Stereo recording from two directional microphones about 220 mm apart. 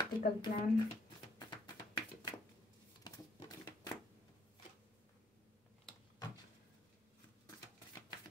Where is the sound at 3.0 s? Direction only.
20° left (ahead or behind).